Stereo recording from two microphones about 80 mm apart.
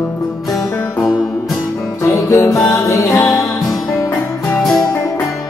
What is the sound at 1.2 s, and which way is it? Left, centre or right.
Music, centre.